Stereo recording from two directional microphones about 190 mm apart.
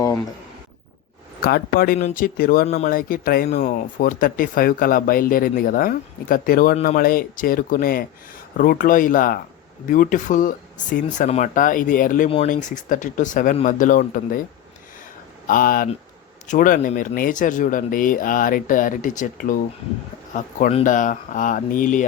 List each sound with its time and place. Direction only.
1.4 s speech: 55° left (ahead or behind)
2.6 s speech: 40° left (ahead or behind)
15.4 s speech: 45° left (ahead or behind)